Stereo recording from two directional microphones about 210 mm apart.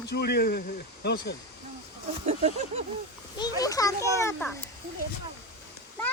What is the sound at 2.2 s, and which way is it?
Speech, 30° right (ahead or behind).